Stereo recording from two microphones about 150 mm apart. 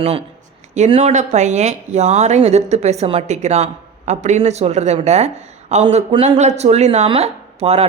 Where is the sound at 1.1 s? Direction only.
50° right (ahead or behind).